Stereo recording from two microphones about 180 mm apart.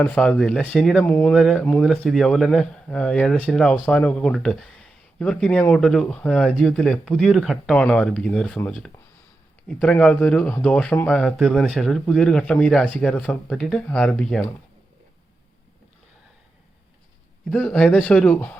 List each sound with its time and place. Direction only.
0.0 s speech: 5° left (ahead or behind)
17.5 s speech: 10° left (ahead or behind)